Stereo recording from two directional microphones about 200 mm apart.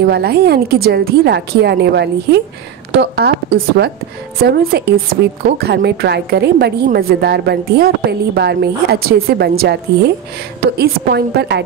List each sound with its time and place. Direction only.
0.1 s a woman's voice: 50° right (ahead or behind)
10.8 s a woman's voice: 55° right (ahead or behind)